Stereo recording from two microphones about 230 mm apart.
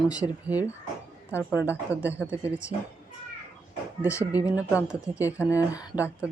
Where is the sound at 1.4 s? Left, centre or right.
Centre.